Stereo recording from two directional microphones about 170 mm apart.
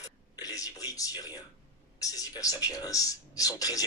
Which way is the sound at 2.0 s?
20° left (ahead or behind).